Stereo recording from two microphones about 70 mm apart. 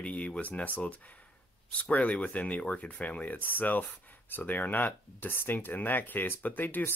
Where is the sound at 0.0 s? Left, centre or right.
Centre.